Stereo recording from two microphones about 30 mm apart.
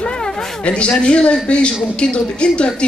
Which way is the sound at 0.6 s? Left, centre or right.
Left.